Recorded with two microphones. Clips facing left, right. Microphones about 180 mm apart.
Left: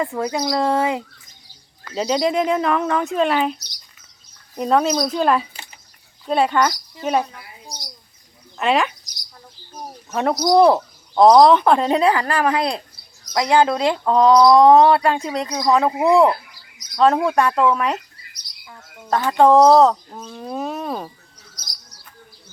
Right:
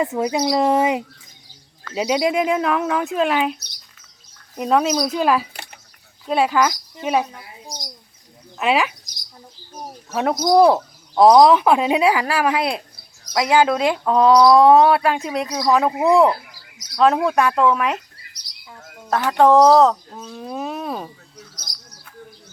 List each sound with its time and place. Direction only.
0.0 s speech: 20° right (ahead or behind)
2.0 s speech: 5° right (ahead or behind)
7.3 s bird: 20° right (ahead or behind)
8.5 s speech: 5° right (ahead or behind)
10.1 s speech: 5° right (ahead or behind)
19.0 s speech: centre (ahead or behind)